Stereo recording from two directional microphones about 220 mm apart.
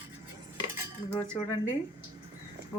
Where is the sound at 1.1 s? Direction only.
5° left (ahead or behind).